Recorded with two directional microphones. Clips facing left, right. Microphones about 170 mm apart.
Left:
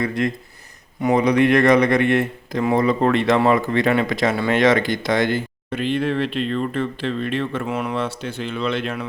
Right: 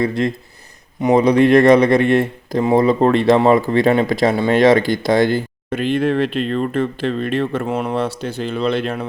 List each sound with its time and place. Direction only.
0.0 s speech: 30° right (ahead or behind)